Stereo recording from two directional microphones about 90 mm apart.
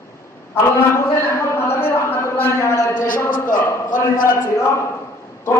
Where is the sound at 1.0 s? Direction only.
30° left (ahead or behind).